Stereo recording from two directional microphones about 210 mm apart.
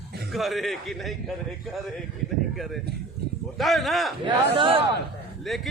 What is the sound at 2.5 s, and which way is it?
A man's voice, centre (ahead or behind).